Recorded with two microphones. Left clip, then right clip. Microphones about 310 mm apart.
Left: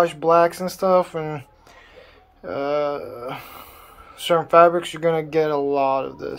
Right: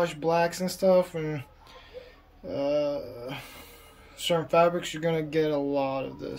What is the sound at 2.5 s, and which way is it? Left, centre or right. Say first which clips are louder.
Speech: left 4 dB; centre.